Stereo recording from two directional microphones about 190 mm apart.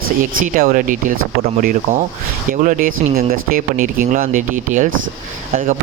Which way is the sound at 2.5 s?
45° right (ahead or behind).